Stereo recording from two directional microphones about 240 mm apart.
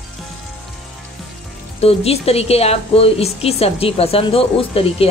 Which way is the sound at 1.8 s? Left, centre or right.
Left.